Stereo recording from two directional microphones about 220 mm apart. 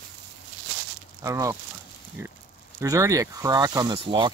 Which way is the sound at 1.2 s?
15° right (ahead or behind).